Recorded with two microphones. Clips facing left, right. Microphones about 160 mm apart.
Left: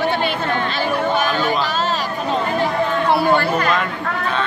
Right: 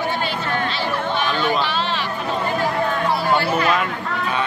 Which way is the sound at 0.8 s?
45° left (ahead or behind).